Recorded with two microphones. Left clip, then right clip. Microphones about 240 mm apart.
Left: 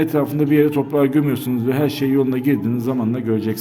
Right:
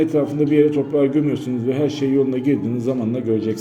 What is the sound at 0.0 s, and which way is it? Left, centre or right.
A man's voice, left.